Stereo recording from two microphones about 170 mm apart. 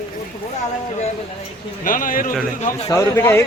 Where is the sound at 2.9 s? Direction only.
15° left (ahead or behind).